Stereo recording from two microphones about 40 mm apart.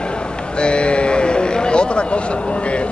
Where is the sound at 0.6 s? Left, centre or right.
Left.